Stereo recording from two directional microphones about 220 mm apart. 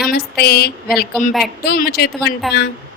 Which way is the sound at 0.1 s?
45° left (ahead or behind).